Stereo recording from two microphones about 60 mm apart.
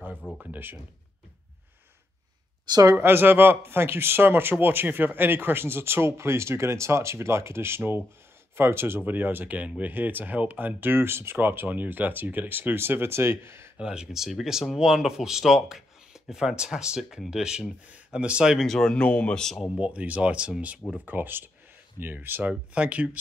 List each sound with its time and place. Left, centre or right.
0.2 s speech: centre
3.0 s speech: right
13.7 s speech: centre
18.7 s speech: centre
19.8 s speech: right
21.0 s speech: right
22.4 s speech: right